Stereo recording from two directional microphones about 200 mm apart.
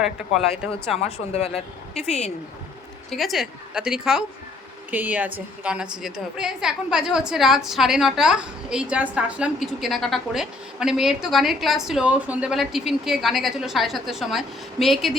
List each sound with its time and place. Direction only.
0.0 s a woman's voice: 5° right (ahead or behind)
1.0 s a woman's voice: 30° left (ahead or behind)
3.1 s a woman's voice: centre (ahead or behind)